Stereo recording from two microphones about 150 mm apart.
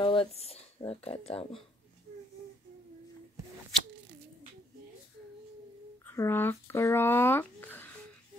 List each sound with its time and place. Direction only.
0.0 s speech: 35° left (ahead or behind)
6.0 s speech: 15° left (ahead or behind)